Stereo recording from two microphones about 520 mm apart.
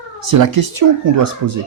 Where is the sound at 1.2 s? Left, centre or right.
Right.